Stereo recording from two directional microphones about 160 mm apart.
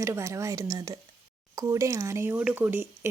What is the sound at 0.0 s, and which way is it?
Speech, 20° right (ahead or behind).